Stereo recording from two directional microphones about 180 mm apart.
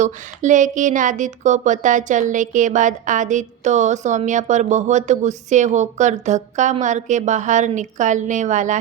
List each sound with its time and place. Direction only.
0.0 s a woman's voice: 45° right (ahead or behind)